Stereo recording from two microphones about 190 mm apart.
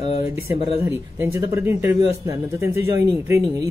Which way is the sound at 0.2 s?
15° right (ahead or behind).